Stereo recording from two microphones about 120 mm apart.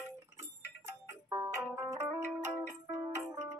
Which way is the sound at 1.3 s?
25° right (ahead or behind).